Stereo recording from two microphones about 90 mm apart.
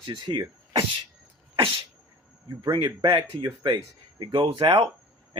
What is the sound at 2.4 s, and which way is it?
Speech, 50° right (ahead or behind).